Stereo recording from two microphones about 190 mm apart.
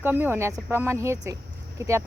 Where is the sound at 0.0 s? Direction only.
10° right (ahead or behind).